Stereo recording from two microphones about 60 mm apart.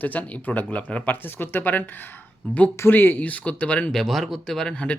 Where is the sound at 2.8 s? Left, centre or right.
Left.